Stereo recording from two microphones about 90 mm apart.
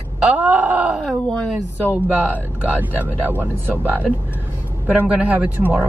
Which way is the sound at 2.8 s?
20° right (ahead or behind).